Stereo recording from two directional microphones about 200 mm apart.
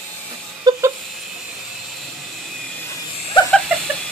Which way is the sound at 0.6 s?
20° right (ahead or behind).